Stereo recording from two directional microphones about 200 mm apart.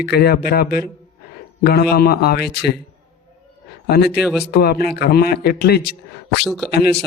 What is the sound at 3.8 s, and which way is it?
Speech, 55° left (ahead or behind).